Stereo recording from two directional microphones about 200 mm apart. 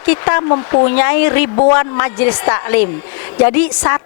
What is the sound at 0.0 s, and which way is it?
Speech, 15° left (ahead or behind).